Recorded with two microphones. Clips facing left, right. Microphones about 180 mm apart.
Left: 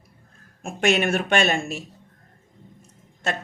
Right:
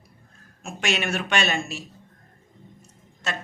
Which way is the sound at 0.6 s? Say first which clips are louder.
Left 6 dB; 55° left (ahead or behind).